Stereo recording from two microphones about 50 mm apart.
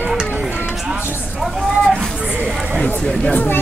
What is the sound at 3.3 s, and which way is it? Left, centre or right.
Speech, left.